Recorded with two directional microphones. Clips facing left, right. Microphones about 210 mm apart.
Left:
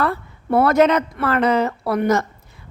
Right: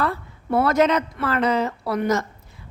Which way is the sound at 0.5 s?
60° left (ahead or behind).